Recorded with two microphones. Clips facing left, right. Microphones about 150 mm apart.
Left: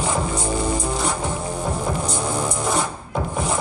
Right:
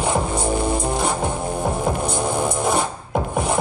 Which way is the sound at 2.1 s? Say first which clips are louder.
Right 3 dB; 55° right (ahead or behind).